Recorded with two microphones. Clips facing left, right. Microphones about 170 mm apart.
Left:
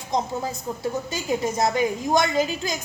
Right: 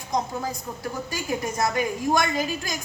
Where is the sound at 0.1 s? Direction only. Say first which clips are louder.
Left 1 dB; 25° left (ahead or behind).